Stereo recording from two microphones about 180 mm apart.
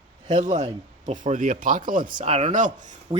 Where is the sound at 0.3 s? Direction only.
45° right (ahead or behind).